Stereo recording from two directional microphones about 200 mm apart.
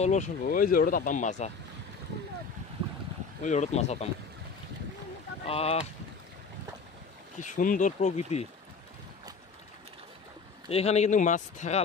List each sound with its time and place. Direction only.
0.0 s speech: 35° left (ahead or behind)
3.4 s speech: 35° left (ahead or behind)
5.5 s speech: 30° left (ahead or behind)
7.3 s speech: 40° left (ahead or behind)
10.7 s speech: 30° left (ahead or behind)